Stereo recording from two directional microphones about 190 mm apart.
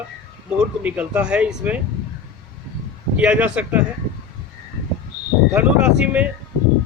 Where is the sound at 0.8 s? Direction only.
10° right (ahead or behind).